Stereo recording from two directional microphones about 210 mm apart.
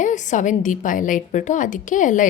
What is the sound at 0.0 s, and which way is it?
A woman's voice, 35° left (ahead or behind).